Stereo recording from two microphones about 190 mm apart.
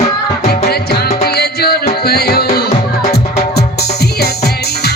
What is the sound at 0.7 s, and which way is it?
Music, 55° left (ahead or behind).